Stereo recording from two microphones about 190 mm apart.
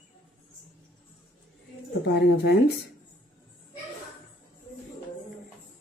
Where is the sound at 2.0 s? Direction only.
65° left (ahead or behind).